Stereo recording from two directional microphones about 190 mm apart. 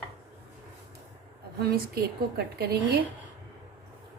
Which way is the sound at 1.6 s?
55° right (ahead or behind).